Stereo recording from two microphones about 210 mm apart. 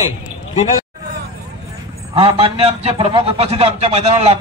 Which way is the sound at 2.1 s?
25° right (ahead or behind).